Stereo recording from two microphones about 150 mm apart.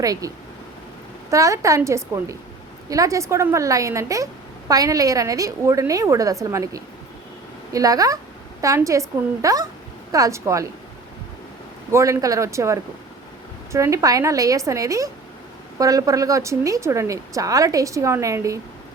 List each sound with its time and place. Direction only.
0.0 s a woman's voice: 25° right (ahead or behind)
1.3 s a woman's voice: 20° right (ahead or behind)
11.9 s a woman's voice: 20° right (ahead or behind)